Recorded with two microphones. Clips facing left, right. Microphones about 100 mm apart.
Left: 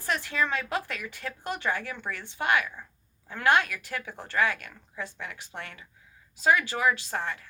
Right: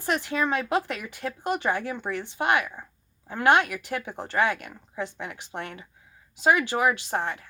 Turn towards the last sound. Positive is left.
turn(degrees=-20)  # may be behind; listen again after turning